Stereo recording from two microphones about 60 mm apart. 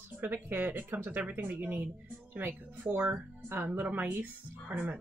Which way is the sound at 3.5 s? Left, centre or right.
Right.